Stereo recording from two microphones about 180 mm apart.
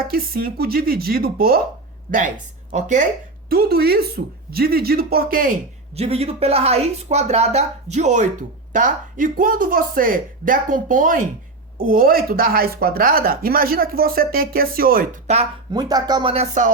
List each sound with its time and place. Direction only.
0.1 s speech: 55° right (ahead or behind)
3.5 s speech: 55° right (ahead or behind)
6.0 s speech: 35° right (ahead or behind); by 15.2 s 50° right (ahead or behind)
15.7 s speech: 20° right (ahead or behind); by 16.7 s 40° right (ahead or behind)